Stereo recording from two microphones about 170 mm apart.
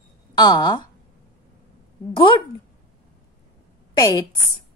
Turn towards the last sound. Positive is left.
turn(degrees=20)  # may be behind; listen again after turning